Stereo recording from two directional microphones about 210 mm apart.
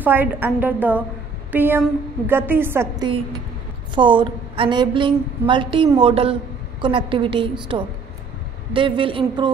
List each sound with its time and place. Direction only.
0.0 s a woman's voice: 10° right (ahead or behind)
3.9 s a woman's voice: 20° right (ahead or behind)